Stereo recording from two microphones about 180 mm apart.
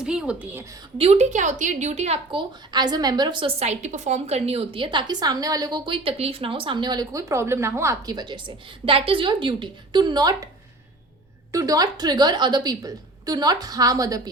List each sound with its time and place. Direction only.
0.0 s speech: 5° right (ahead or behind)
0.9 s a woman's voice: 35° right (ahead or behind)
2.7 s a woman's voice: 20° right (ahead or behind)
11.5 s a woman's voice: 20° right (ahead or behind)